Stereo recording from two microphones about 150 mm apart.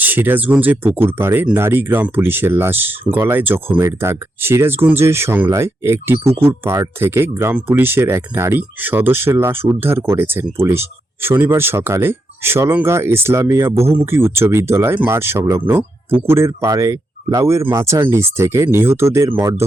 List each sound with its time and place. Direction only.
0.0 s speech: 10° right (ahead or behind)